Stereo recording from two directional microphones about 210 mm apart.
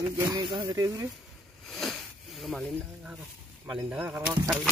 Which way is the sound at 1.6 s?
Centre (ahead or behind).